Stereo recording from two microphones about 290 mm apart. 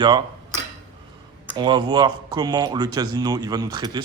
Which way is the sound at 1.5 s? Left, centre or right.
Centre.